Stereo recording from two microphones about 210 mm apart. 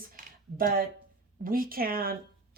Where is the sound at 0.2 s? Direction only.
40° right (ahead or behind).